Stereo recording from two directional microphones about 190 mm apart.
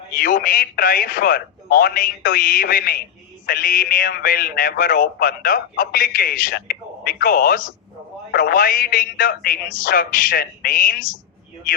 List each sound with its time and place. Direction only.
0.2 s a man's voice: 45° left (ahead or behind)